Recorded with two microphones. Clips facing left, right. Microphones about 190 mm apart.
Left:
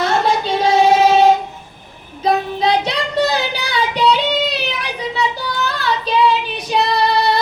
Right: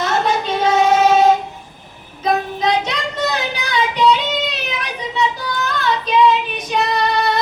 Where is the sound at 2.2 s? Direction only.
30° left (ahead or behind).